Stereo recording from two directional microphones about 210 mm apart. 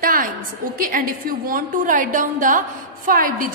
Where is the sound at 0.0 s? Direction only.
40° right (ahead or behind).